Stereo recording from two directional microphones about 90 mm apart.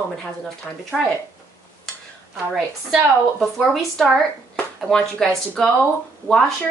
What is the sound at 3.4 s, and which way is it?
Speech, 5° left (ahead or behind).